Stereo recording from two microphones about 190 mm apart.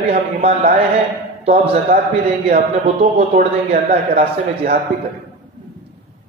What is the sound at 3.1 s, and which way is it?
Speech, 40° right (ahead or behind).